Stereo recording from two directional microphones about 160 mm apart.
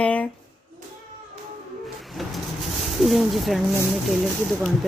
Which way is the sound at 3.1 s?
Centre (ahead or behind).